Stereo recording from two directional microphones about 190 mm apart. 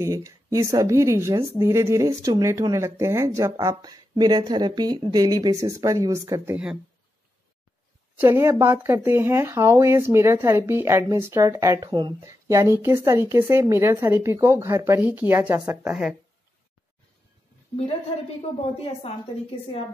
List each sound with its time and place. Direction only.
0.0 s speech: 15° right (ahead or behind)
8.2 s speech: 15° right (ahead or behind)
18.6 s a woman's voice: 30° left (ahead or behind)